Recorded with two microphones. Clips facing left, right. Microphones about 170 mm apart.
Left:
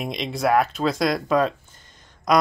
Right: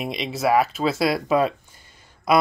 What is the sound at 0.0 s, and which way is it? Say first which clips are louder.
Speech: even; centre (ahead or behind).